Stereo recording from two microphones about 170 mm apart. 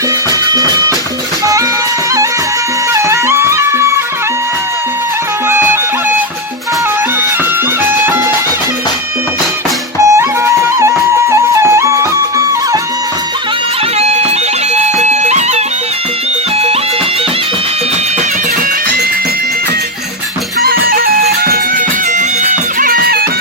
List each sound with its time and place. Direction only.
0.5 s music: 20° right (ahead or behind)
2.9 s music: 15° right (ahead or behind)
5.5 s music: 15° right (ahead or behind)
10.1 s music: 15° right (ahead or behind)
14.9 s music: 40° right (ahead or behind)
20.6 s music: 60° right (ahead or behind)